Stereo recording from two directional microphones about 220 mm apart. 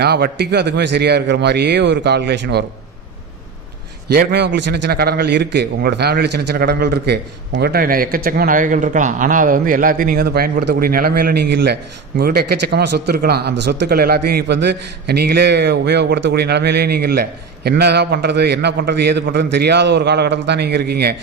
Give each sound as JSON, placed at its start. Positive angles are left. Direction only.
{"t": 0.0, "sound": "a man's voice", "side_deg": -50}
{"t": 4.1, "sound": "a man's voice", "side_deg": -45}